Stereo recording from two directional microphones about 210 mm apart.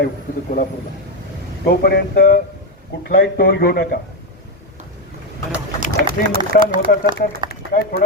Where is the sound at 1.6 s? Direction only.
45° left (ahead or behind).